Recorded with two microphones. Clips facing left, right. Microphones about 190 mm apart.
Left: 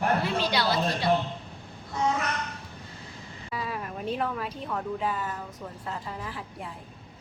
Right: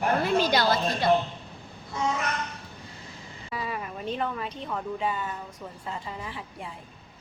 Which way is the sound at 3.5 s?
Centre (ahead or behind).